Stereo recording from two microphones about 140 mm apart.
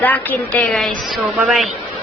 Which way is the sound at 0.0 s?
10° left (ahead or behind).